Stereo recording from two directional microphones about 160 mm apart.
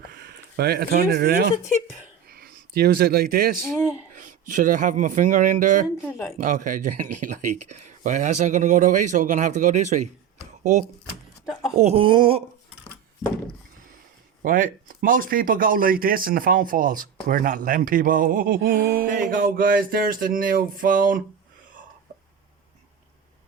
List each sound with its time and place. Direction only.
0.1 s speech: 75° right (ahead or behind)
4.1 s speech: 55° right (ahead or behind)
6.0 s speech: 10° left (ahead or behind)
6.4 s speech: 55° right (ahead or behind)
11.8 s speech: 40° right (ahead or behind)
14.4 s speech: 60° right (ahead or behind)